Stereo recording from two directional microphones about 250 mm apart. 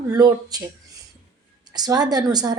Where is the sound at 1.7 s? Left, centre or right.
Centre.